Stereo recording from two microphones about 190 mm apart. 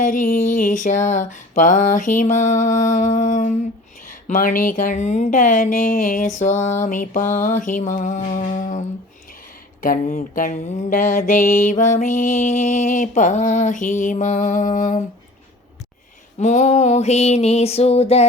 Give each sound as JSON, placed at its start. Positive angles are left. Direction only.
{"t": 0.0, "sound": "mantra", "side_deg": 45}
{"t": 4.0, "sound": "speech", "side_deg": 45}
{"t": 9.8, "sound": "mantra", "side_deg": 45}
{"t": 16.4, "sound": "mantra", "side_deg": 35}